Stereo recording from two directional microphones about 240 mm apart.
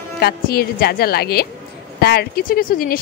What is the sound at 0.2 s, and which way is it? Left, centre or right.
Speech, left.